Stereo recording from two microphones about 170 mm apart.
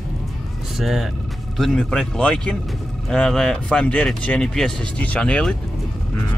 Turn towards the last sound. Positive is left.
turn(degrees=5)  # may be behind; listen again after turning